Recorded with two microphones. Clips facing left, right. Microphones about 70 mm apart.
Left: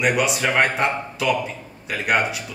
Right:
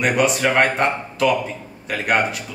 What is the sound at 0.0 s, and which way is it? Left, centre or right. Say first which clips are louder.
A man's voice: right 2 dB; centre.